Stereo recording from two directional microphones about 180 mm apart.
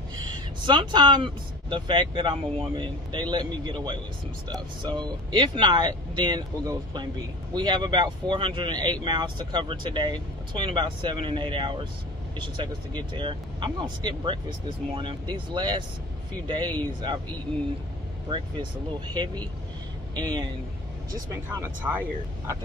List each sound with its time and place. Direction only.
0.3 s speech: 25° right (ahead or behind)
18.3 s speech: 25° right (ahead or behind)
21.5 s speech: 10° right (ahead or behind)